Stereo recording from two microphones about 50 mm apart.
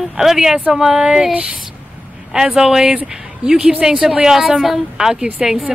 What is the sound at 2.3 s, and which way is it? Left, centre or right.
A woman's voice, centre.